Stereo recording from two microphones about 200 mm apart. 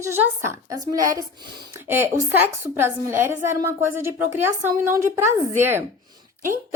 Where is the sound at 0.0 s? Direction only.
15° right (ahead or behind).